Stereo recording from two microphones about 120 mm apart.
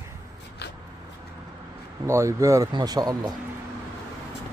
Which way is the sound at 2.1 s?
25° right (ahead or behind).